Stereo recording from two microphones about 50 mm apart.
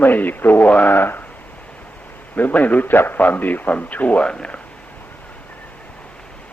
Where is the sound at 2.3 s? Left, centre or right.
Left.